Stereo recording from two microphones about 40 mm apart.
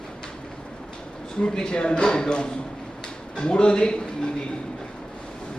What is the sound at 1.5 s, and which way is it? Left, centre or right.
A man's voice, left.